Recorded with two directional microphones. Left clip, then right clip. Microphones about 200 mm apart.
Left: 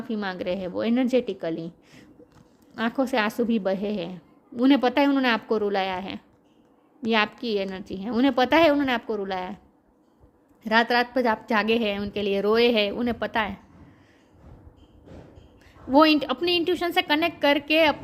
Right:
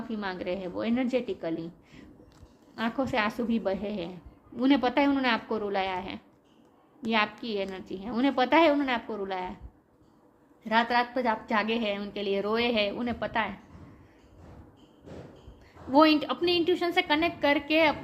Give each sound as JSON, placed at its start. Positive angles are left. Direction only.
{"t": 0.1, "sound": "a woman's voice", "side_deg": 50}
{"t": 7.4, "sound": "a woman's voice", "side_deg": 50}
{"t": 10.6, "sound": "a woman's voice", "side_deg": 55}
{"t": 15.9, "sound": "a woman's voice", "side_deg": 50}